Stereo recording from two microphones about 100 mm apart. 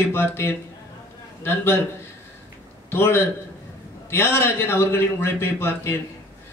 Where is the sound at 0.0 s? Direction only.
25° left (ahead or behind).